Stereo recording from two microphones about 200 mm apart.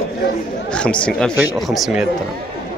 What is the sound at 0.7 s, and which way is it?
Speech, 5° left (ahead or behind).